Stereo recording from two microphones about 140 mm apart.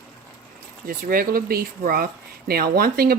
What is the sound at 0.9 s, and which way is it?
Speech, 90° right.